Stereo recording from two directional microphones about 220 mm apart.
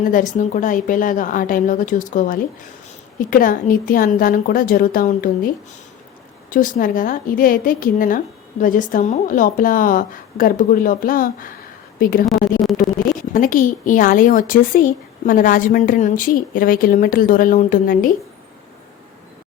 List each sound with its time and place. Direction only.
0.0 s a woman's voice: 35° left (ahead or behind)
6.5 s a woman's voice: 35° left (ahead or behind)